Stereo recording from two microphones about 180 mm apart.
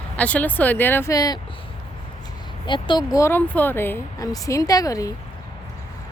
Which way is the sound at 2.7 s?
25° left (ahead or behind).